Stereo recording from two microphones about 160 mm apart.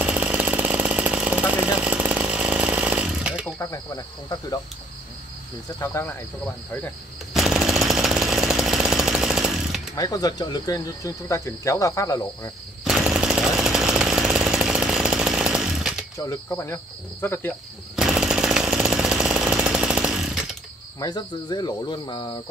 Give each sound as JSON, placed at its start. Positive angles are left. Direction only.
{"t": 0.0, "sound": "chainsaw", "side_deg": -10}
{"t": 3.5, "sound": "speech", "side_deg": 20}
{"t": 5.8, "sound": "cricket", "side_deg": 15}
{"t": 7.3, "sound": "jackhammer", "side_deg": -5}
{"t": 9.9, "sound": "speech", "side_deg": 25}
{"t": 12.8, "sound": "chainsaw", "side_deg": -5}
{"t": 16.2, "sound": "cricket", "side_deg": 20}
{"t": 17.9, "sound": "chainsaw", "side_deg": -5}
{"t": 21.0, "sound": "speech", "side_deg": 25}